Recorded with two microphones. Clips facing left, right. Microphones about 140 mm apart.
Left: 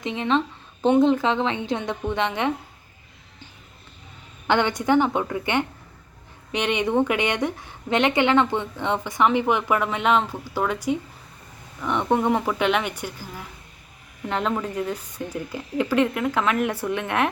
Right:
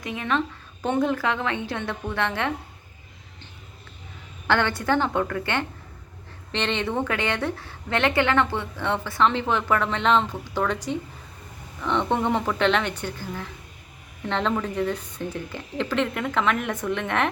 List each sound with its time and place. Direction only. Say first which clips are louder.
0.0 s a woman's voice: left 3 dB; 25° left (ahead or behind)
4.4 s a woman's voice: left 2 dB; 15° left (ahead or behind)